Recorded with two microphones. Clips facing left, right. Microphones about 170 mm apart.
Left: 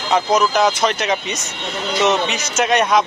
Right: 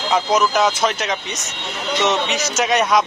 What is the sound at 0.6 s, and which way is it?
Speech, centre (ahead or behind).